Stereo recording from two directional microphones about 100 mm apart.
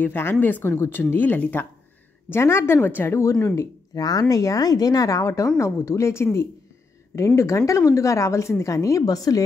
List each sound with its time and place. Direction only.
0.0 s speech: 20° left (ahead or behind); by 9.4 s 35° left (ahead or behind)